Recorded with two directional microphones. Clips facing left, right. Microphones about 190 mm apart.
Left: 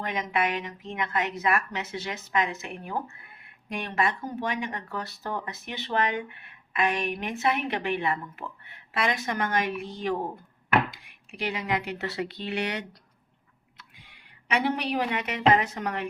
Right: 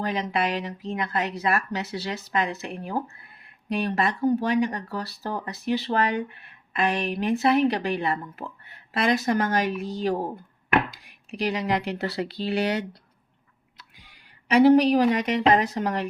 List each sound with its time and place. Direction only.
0.0 s speech: 35° right (ahead or behind)
14.4 s speech: 35° right (ahead or behind)